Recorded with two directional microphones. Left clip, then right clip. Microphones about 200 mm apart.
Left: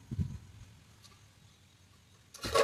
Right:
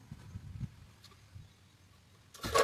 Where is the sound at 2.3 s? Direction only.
Centre (ahead or behind).